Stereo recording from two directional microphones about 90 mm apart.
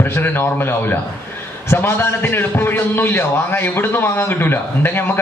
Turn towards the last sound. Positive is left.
turn(degrees=25)  # may be behind; listen again after turning